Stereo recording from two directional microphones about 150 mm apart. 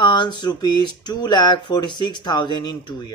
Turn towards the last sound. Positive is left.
turn(degrees=30)  # may be behind; listen again after turning